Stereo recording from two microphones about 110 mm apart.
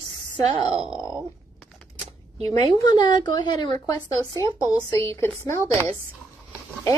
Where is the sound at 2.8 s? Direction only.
40° left (ahead or behind); by 5.8 s 25° left (ahead or behind).